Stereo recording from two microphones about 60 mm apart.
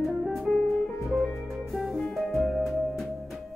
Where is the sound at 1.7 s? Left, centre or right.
Centre.